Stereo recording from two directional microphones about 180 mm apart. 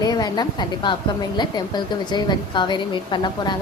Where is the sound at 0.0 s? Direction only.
20° left (ahead or behind).